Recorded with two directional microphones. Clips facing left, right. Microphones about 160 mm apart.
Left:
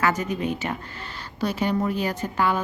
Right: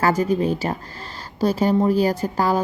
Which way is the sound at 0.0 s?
35° right (ahead or behind).